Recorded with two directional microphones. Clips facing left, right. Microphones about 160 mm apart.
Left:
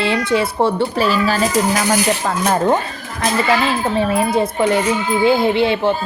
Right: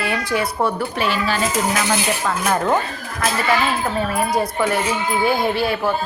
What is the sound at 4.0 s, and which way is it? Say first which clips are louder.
A woman's voice: left 4 dB; 25° left (ahead or behind).